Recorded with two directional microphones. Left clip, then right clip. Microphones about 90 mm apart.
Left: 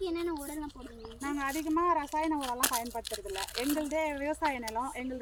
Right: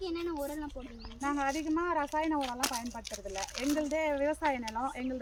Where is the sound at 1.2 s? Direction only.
25° right (ahead or behind).